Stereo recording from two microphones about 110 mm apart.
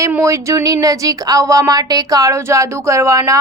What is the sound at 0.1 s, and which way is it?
Speech, 25° right (ahead or behind).